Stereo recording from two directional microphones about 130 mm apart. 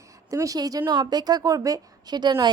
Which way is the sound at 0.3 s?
25° right (ahead or behind).